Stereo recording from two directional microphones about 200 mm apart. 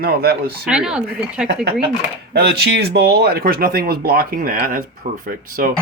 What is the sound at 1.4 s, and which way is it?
Speech, 55° right (ahead or behind).